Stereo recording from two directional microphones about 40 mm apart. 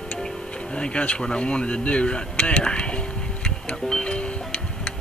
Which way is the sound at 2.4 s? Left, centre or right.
Left.